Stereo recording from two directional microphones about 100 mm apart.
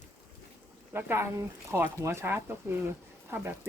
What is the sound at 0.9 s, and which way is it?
Speech, 20° right (ahead or behind).